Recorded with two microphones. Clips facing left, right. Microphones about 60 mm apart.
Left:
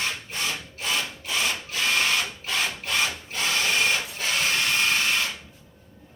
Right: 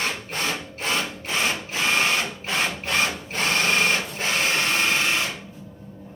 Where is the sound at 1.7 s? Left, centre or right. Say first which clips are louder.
Right 1 dB; right.